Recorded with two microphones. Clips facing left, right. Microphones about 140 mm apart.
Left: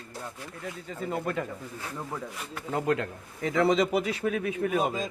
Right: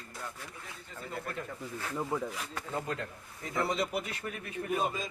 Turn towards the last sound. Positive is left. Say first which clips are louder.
# left 6 dB
turn(degrees=90)